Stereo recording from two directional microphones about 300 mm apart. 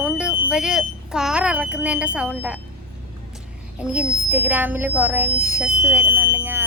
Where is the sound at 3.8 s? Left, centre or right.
Centre.